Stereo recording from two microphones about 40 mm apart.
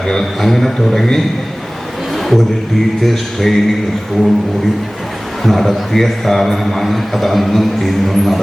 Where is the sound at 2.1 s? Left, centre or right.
Centre.